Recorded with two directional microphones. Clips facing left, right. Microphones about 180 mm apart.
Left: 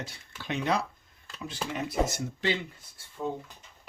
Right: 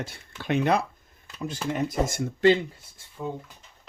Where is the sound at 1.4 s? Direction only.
40° right (ahead or behind).